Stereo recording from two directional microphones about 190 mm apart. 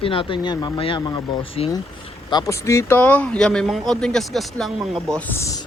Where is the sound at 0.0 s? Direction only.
30° left (ahead or behind).